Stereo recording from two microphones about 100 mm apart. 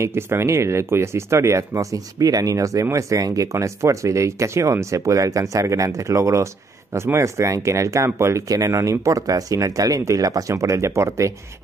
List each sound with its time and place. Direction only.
0.0 s speech: 25° right (ahead or behind)